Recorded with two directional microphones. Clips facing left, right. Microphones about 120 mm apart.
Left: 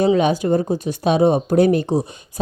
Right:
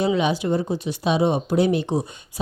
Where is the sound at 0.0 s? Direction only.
45° left (ahead or behind).